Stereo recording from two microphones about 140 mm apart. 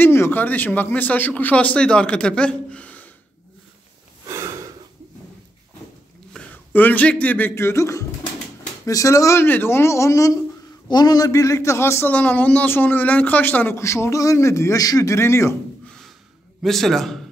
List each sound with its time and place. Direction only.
0.0 s a man's voice: 15° left (ahead or behind)
4.3 s snort: 20° right (ahead or behind)
6.3 s a man's voice: 10° left (ahead or behind)
16.6 s a man's voice: centre (ahead or behind)